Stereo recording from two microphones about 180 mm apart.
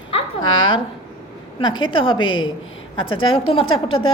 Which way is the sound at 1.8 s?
30° left (ahead or behind).